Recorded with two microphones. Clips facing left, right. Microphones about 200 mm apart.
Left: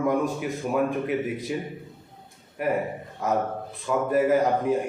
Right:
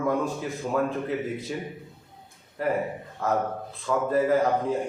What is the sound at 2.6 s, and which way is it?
A man's voice, 20° left (ahead or behind).